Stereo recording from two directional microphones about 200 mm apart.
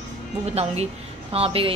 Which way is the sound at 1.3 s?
30° right (ahead or behind).